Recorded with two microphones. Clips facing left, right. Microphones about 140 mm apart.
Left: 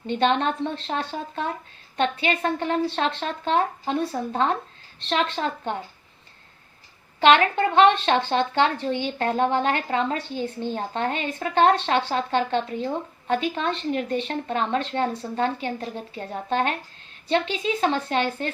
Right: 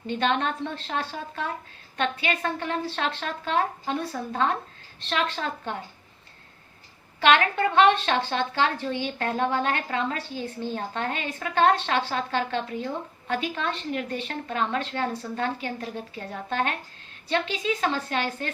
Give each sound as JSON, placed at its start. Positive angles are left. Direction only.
{"t": 0.1, "sound": "a woman's voice", "side_deg": 25}
{"t": 7.5, "sound": "a woman's voice", "side_deg": 30}